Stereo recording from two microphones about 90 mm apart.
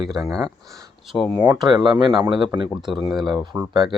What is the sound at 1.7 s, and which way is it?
Speech, 55° right (ahead or behind).